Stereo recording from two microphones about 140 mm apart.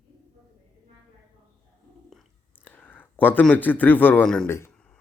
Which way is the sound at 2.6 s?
10° left (ahead or behind).